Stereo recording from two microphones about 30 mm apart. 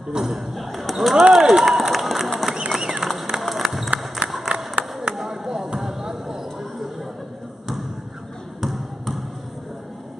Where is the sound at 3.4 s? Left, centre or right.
Centre.